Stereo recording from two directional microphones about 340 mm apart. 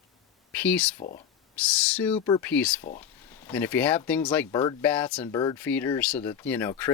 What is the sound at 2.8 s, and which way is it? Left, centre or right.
Speech, left.